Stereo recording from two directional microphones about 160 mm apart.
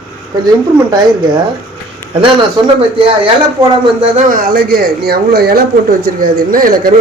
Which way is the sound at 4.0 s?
50° right (ahead or behind).